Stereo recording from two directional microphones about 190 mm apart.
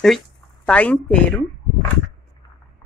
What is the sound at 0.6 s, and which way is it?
Speech, 5° left (ahead or behind).